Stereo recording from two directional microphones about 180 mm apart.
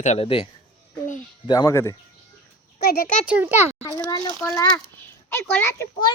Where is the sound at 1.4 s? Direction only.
20° left (ahead or behind).